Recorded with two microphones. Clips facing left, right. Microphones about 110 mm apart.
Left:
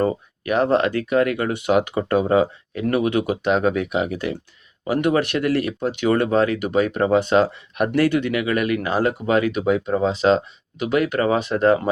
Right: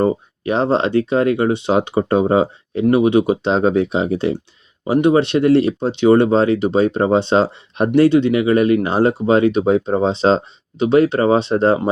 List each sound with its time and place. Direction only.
0.0 s speech: 25° right (ahead or behind)